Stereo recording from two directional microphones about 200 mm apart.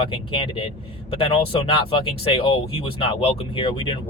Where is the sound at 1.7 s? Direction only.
25° left (ahead or behind).